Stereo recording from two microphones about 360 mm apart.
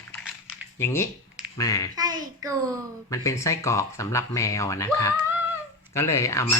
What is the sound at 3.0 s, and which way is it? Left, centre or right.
Speech, centre.